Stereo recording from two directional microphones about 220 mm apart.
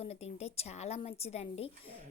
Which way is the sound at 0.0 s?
30° left (ahead or behind).